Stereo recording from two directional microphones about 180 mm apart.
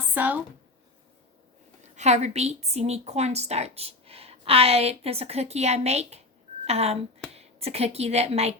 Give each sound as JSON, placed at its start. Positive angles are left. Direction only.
{"t": 0.1, "sound": "speech", "side_deg": -10}
{"t": 2.0, "sound": "a woman's voice", "side_deg": -40}